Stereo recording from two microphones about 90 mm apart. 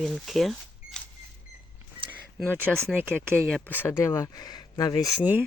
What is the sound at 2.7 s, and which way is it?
Speech, 5° left (ahead or behind).